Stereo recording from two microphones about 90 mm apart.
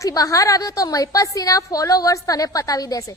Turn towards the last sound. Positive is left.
turn(degrees=40)  # may be behind; listen again after turning